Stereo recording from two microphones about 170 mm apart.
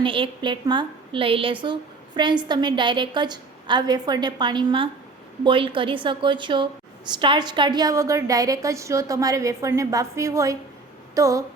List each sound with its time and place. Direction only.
0.0 s a woman's voice: 30° right (ahead or behind)